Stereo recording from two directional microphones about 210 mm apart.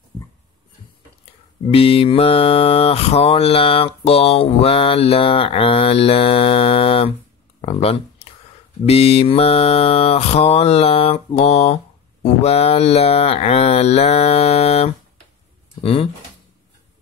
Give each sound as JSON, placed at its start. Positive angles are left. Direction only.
{"t": 1.7, "sound": "mantra", "side_deg": 25}
{"t": 7.6, "sound": "speech", "side_deg": 30}
{"t": 8.8, "sound": "mantra", "side_deg": 30}